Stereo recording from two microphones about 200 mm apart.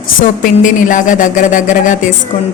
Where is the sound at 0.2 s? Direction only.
40° left (ahead or behind).